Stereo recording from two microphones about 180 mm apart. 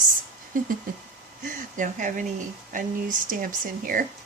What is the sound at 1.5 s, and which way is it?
Speech, 45° right (ahead or behind).